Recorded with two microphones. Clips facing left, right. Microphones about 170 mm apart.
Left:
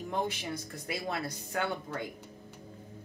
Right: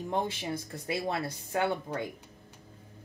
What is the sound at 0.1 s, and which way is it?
Speech, 25° right (ahead or behind).